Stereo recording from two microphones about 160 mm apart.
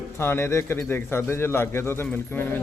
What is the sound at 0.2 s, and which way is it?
A man's voice, 15° left (ahead or behind).